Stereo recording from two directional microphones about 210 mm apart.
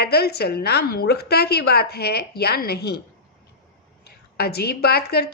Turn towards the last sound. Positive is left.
turn(degrees=50)  # may be behind; listen again after turning